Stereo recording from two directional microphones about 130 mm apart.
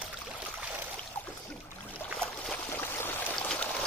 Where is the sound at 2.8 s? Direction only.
15° left (ahead or behind).